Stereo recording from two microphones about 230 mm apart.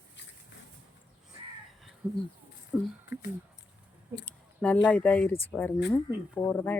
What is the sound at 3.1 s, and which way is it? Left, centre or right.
Speech, left.